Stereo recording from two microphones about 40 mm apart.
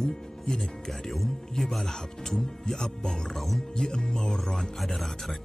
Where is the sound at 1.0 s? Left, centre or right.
Centre.